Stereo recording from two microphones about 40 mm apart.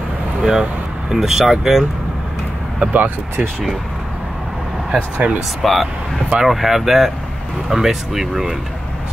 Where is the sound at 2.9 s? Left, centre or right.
Right.